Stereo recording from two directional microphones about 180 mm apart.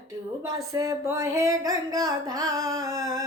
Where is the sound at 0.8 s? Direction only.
15° right (ahead or behind).